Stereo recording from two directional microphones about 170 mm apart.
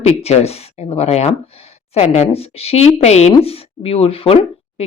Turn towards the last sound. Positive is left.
turn(degrees=35)  # may be behind; listen again after turning